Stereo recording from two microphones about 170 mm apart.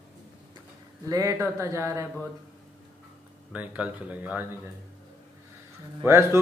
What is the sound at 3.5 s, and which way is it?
Speech, 10° right (ahead or behind).